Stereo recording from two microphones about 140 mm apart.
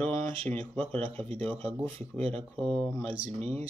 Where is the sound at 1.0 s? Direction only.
45° right (ahead or behind).